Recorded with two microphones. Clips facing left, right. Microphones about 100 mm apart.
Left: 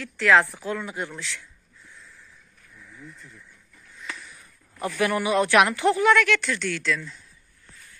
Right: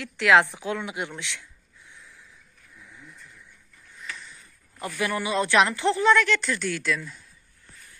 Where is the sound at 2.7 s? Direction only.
15° right (ahead or behind).